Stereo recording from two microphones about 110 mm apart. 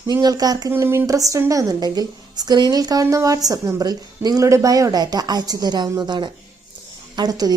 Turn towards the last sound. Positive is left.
turn(degrees=-35)  # may be behind; listen again after turning